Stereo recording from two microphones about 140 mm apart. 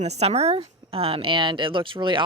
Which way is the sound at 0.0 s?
50° right (ahead or behind).